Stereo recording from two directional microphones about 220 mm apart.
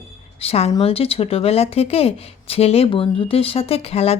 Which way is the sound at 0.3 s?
25° left (ahead or behind).